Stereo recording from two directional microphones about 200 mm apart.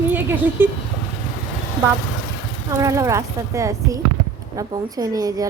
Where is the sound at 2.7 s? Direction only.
15° right (ahead or behind).